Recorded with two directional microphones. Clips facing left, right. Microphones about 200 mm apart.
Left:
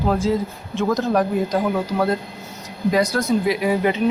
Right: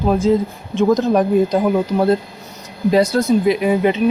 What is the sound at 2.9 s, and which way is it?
Speech, 25° right (ahead or behind).